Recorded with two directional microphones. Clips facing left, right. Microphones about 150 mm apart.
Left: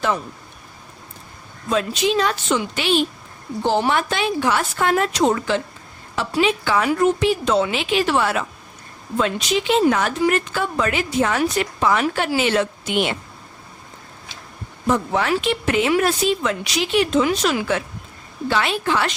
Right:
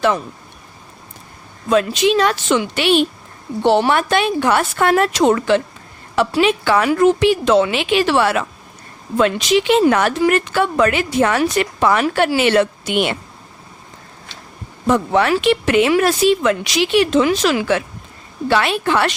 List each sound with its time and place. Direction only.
1.7 s a woman's voice: 80° right; by 13.1 s 65° right (ahead or behind)
14.8 s speech: 75° right (ahead or behind)
18.4 s a woman's voice: 65° right (ahead or behind)